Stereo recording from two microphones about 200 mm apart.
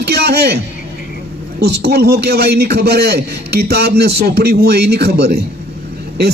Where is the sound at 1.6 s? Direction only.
50° right (ahead or behind).